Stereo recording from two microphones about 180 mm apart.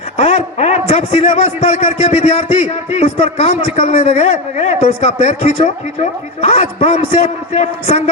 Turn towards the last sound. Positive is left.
turn(degrees=35)  # may be behind; listen again after turning